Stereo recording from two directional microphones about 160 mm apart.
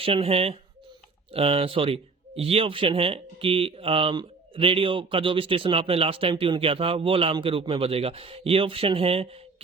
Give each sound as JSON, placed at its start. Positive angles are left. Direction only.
{"t": 0.0, "sound": "speech", "side_deg": -35}